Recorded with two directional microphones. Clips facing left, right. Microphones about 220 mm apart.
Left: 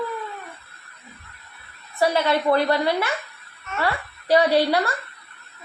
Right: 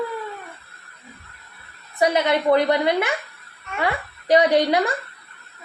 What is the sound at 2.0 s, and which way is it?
A child's voice, 20° right (ahead or behind).